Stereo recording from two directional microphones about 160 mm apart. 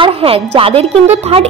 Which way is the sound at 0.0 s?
35° right (ahead or behind).